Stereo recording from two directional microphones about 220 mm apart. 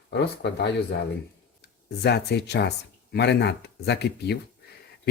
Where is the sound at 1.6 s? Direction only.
50° left (ahead or behind).